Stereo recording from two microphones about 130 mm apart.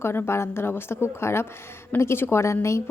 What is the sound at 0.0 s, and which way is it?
A woman's voice, 20° left (ahead or behind).